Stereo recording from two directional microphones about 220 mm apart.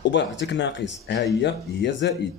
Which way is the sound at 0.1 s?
55° left (ahead or behind).